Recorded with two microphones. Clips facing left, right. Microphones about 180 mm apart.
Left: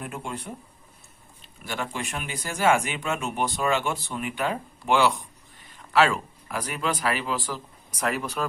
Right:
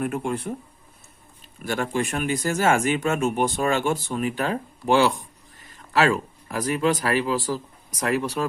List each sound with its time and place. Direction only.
0.0 s speech: 55° right (ahead or behind)
1.6 s speech: 50° right (ahead or behind)
5.7 s a sound: 40° right (ahead or behind)
6.6 s speech: 40° right (ahead or behind)